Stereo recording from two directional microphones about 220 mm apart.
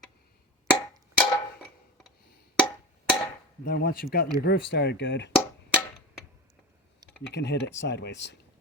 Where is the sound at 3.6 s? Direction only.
45° left (ahead or behind).